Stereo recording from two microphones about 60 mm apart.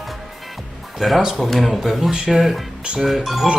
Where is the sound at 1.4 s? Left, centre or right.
Centre.